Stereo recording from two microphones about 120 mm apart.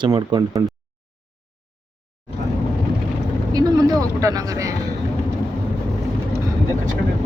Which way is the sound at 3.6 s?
30° right (ahead or behind).